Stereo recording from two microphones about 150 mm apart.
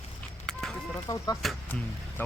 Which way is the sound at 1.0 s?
25° left (ahead or behind).